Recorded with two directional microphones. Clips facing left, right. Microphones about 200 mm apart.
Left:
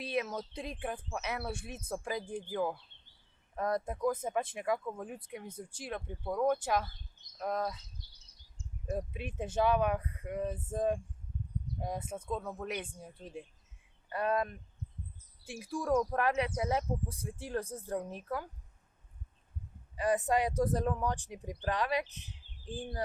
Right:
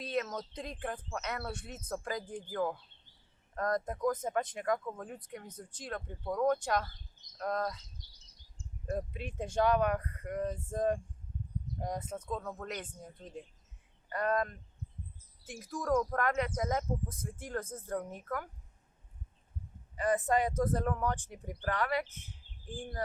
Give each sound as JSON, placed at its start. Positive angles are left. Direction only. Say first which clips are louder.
{"t": 0.1, "sound": "speech", "louder": "even", "side_deg": 10}
{"t": 8.9, "sound": "speech", "louder": "even", "side_deg": 5}
{"t": 20.0, "sound": "speech", "louder": "even", "side_deg": 15}